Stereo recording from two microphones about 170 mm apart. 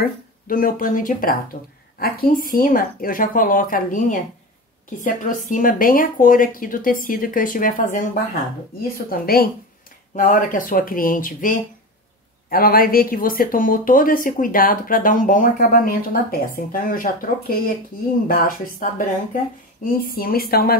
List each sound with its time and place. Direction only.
0.0 s speech: 55° left (ahead or behind)
10.1 s speech: 50° left (ahead or behind)